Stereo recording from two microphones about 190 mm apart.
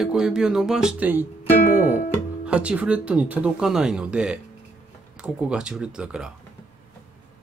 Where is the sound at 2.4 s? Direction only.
5° right (ahead or behind).